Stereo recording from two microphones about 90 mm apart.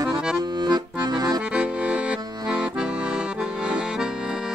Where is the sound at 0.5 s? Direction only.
55° right (ahead or behind).